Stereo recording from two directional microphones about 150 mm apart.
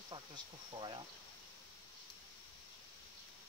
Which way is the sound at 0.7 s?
30° right (ahead or behind).